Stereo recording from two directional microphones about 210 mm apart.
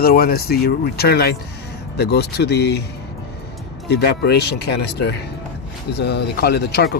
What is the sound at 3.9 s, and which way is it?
Speech, 50° left (ahead or behind).